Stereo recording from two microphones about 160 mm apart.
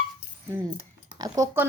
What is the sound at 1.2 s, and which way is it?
Speech, 20° right (ahead or behind).